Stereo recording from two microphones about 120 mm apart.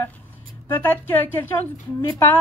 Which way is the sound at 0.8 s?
15° left (ahead or behind).